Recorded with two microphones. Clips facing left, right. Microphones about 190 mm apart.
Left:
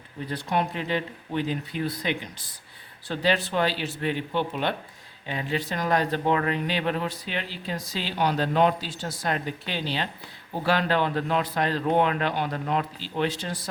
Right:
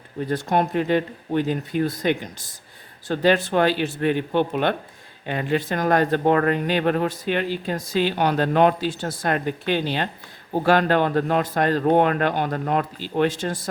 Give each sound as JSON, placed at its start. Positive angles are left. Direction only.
{"t": 0.3, "sound": "speech", "side_deg": -50}